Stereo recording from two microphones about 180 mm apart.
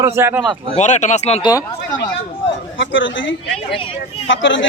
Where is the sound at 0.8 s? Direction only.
40° left (ahead or behind).